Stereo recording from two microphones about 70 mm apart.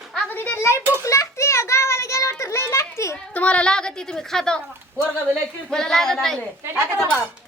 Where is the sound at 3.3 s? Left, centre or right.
Centre.